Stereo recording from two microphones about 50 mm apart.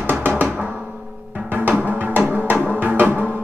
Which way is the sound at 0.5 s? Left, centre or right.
Right.